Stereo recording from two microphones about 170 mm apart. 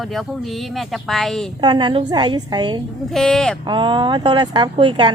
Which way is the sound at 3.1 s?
Centre (ahead or behind).